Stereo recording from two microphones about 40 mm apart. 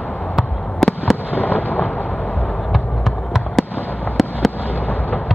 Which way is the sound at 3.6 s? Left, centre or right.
Centre.